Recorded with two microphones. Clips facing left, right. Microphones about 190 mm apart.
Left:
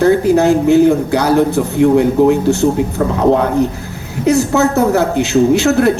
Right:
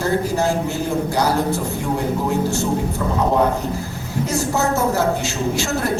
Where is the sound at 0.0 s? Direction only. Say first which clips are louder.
Left 9 dB; 65° left (ahead or behind).